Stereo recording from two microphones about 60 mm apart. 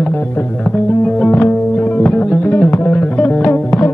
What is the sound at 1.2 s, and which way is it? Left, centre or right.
Music, left.